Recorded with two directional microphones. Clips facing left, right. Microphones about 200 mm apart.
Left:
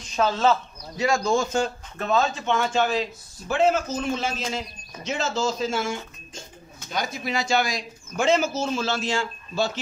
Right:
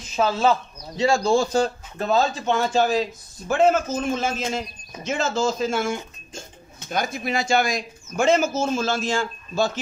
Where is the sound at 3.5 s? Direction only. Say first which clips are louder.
Right 3 dB; 50° right (ahead or behind).